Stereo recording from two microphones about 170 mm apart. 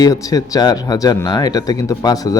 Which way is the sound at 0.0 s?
20° left (ahead or behind).